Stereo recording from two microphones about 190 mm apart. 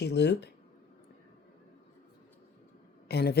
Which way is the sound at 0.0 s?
60° left (ahead or behind).